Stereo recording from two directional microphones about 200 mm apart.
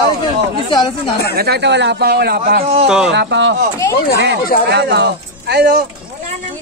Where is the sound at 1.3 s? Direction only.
55° right (ahead or behind).